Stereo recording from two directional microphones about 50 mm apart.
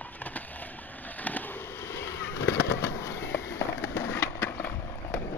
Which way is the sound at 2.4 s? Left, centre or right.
Left.